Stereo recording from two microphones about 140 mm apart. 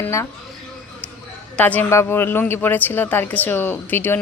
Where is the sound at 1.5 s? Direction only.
10° left (ahead or behind).